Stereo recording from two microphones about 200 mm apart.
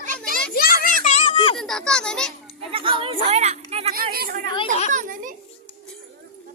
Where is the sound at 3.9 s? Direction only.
50° right (ahead or behind).